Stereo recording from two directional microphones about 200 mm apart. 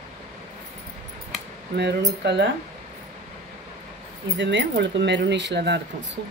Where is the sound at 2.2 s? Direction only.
60° right (ahead or behind).